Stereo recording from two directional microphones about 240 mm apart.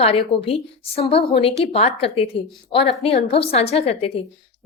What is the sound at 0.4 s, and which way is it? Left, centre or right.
A woman's voice, left.